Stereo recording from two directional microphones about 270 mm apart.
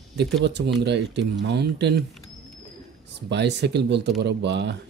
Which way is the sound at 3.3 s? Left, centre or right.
Right.